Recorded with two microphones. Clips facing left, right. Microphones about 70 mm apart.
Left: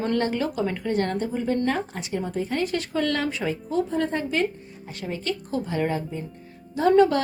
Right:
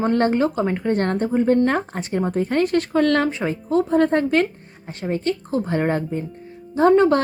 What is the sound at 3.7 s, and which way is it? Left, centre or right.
Speech, right.